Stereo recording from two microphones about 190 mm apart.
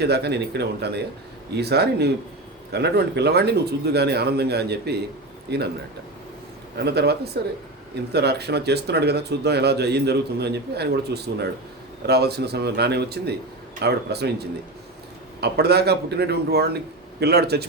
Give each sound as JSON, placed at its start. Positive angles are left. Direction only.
{"t": 0.0, "sound": "speech", "side_deg": -60}
{"t": 6.7, "sound": "speech", "side_deg": -60}